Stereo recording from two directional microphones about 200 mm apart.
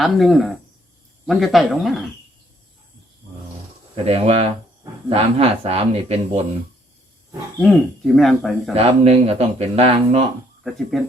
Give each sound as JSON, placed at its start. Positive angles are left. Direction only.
{"t": 0.0, "sound": "speech", "side_deg": 0}
{"t": 3.9, "sound": "speech", "side_deg": -30}
{"t": 7.6, "sound": "speech", "side_deg": 0}
{"t": 8.7, "sound": "speech", "side_deg": -30}
{"t": 10.6, "sound": "speech", "side_deg": 0}